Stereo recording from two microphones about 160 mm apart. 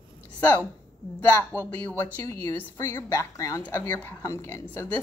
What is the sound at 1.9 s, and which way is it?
Speech, 15° left (ahead or behind).